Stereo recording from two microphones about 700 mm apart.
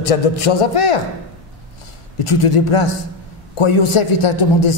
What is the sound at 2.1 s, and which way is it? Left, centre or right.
A man's voice, left.